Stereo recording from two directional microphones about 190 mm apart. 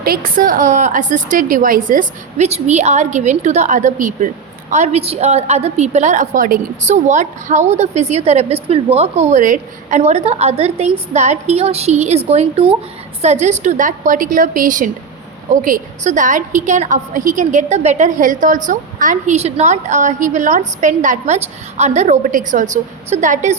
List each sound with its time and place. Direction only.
0.0 s a woman's voice: 50° right (ahead or behind)